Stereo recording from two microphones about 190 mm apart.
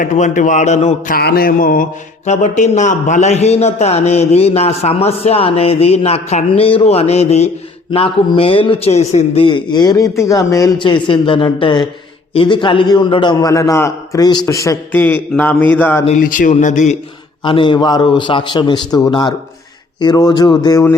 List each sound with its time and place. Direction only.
0.0 s mantra: 40° left (ahead or behind)
1.1 s mantra: 55° left (ahead or behind); by 11.8 s 25° left (ahead or behind)
12.3 s a man's voice: 25° left (ahead or behind); by 16.0 s 10° left (ahead or behind)
16.0 s mantra: 45° left (ahead or behind)
17.4 s a man's voice: 25° left (ahead or behind)